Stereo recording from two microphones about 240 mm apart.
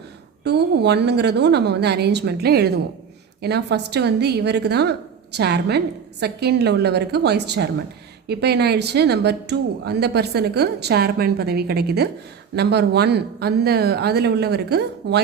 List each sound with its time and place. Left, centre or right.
0.4 s a woman's voice: right